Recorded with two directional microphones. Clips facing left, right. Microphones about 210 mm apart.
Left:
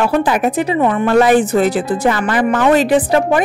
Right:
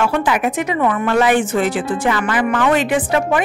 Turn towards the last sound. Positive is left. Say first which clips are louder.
# left 4 dB
turn(degrees=35)  # may be behind; listen again after turning